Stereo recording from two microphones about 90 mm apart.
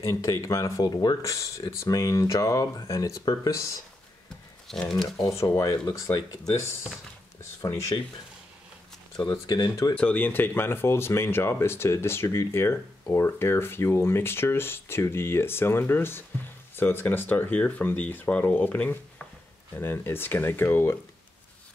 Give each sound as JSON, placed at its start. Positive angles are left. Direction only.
{"t": 0.0, "sound": "speech", "side_deg": 40}
{"t": 4.6, "sound": "speech", "side_deg": 5}
{"t": 5.2, "sound": "speech", "side_deg": 30}
{"t": 9.2, "sound": "speech", "side_deg": 50}
{"t": 9.9, "sound": "speech", "side_deg": 20}